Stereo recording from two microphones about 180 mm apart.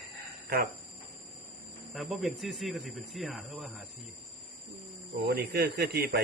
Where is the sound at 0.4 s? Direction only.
60° right (ahead or behind).